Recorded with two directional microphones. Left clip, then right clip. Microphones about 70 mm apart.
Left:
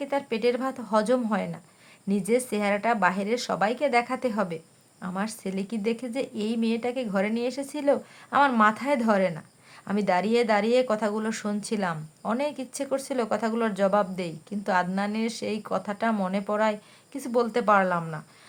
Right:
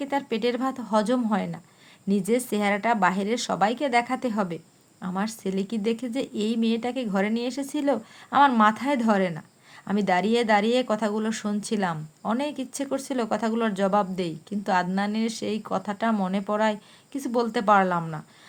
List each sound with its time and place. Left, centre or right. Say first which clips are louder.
0.0 s speech: even; right